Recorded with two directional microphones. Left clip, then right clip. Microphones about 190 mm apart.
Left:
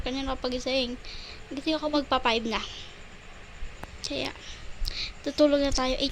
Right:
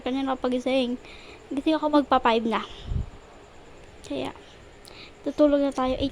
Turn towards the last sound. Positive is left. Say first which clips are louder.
# right 2 dB
turn(degrees=-15)  # may be behind; listen again after turning